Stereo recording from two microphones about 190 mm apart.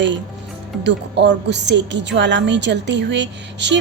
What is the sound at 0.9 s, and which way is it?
A woman's voice, 65° right (ahead or behind).